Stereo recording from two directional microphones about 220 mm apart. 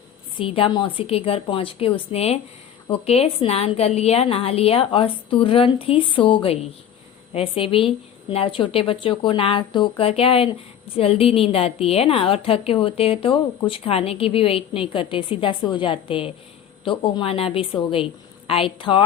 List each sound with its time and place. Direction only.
0.3 s a woman's voice: 25° left (ahead or behind)